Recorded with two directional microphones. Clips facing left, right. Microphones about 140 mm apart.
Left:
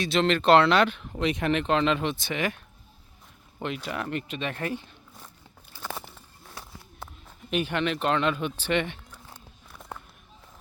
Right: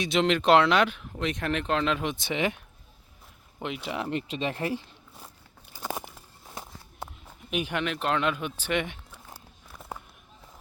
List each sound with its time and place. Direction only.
0.0 s speech: 15° right (ahead or behind)
2.2 s speech: 20° right (ahead or behind)
3.6 s speech: 15° right (ahead or behind); by 4.9 s 30° right (ahead or behind)
5.7 s walk: 15° right (ahead or behind)
7.3 s speech: 10° right (ahead or behind)
9.9 s a sound: 10° right (ahead or behind)